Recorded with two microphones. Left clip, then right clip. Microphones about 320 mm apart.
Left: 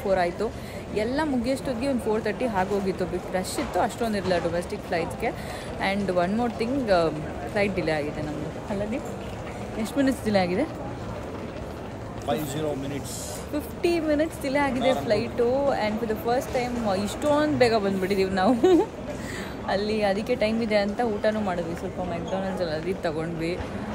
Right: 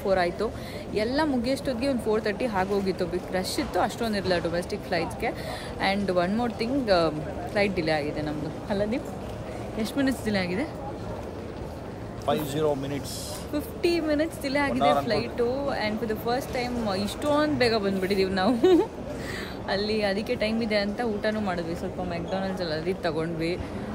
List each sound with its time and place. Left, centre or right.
0.1 s speech: centre
9.9 s speech: centre
12.3 s a man's voice: centre
13.8 s speech: centre